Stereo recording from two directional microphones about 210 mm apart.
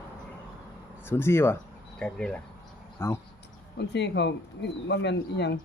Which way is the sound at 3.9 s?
55° left (ahead or behind).